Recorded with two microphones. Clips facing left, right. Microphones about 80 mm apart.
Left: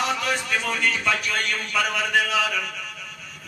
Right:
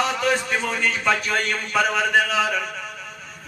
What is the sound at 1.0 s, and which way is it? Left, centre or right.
A man's voice, right.